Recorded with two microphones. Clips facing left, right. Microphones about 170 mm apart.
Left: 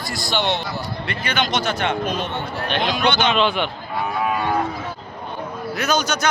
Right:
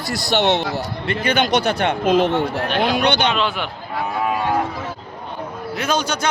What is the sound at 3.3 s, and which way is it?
Speech, centre (ahead or behind).